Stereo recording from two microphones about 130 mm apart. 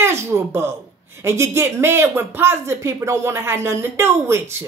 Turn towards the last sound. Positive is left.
turn(degrees=-20)  # may be behind; listen again after turning